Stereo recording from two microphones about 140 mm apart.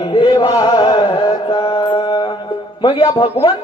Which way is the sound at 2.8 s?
35° left (ahead or behind).